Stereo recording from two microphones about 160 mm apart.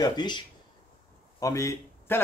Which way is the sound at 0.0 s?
25° left (ahead or behind).